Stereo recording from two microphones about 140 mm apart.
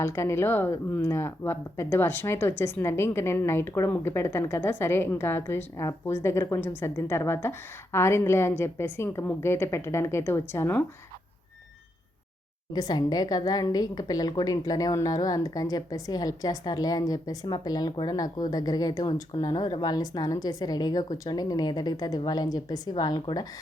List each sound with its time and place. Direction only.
0.0 s speech: 20° left (ahead or behind)
12.7 s a woman's voice: 30° left (ahead or behind)